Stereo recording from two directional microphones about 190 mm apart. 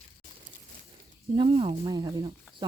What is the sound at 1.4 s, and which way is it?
Speech, 30° right (ahead or behind).